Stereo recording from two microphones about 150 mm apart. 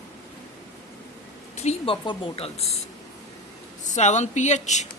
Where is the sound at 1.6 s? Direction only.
40° left (ahead or behind).